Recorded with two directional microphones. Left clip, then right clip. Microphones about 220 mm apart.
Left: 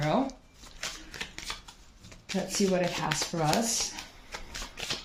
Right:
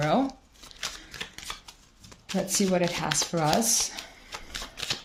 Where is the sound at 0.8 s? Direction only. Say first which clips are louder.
Right 2 dB; 25° right (ahead or behind).